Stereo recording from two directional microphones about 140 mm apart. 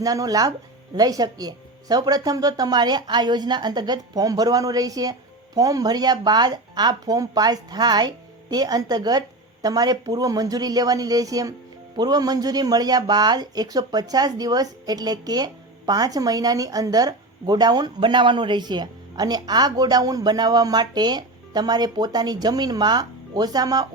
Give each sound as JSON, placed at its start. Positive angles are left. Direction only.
{"t": 0.0, "sound": "a woman's voice", "side_deg": -25}